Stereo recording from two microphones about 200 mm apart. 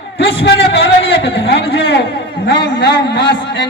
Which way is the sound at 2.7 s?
55° left (ahead or behind).